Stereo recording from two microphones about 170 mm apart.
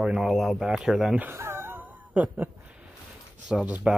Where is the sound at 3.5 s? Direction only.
Centre (ahead or behind).